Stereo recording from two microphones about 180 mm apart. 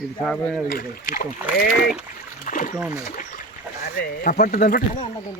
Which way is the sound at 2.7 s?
15° right (ahead or behind).